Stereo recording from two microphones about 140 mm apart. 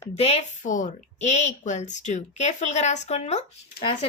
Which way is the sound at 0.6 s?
65° left (ahead or behind).